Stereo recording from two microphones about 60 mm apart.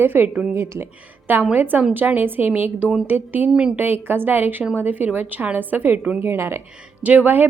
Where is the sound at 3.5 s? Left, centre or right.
Centre.